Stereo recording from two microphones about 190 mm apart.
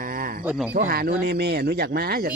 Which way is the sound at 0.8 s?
50° right (ahead or behind).